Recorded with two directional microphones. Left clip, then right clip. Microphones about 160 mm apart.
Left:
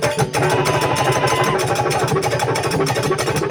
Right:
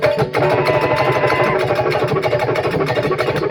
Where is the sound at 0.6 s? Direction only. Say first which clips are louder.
Right 2 dB; 5° right (ahead or behind).